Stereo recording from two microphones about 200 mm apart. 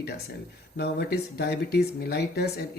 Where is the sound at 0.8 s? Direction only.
55° left (ahead or behind).